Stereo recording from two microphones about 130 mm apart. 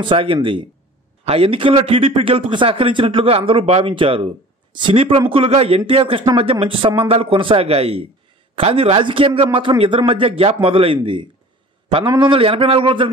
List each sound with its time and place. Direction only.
0.0 s a man's voice: 40° right (ahead or behind)